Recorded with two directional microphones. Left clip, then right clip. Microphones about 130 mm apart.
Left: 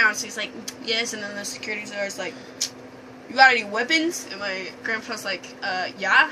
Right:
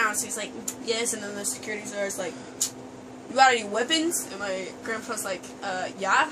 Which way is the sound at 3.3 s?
20° right (ahead or behind).